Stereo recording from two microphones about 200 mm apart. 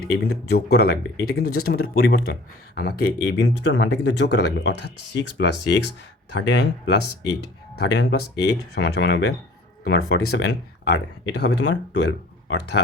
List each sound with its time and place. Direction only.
0.0 s speech: 50° left (ahead or behind)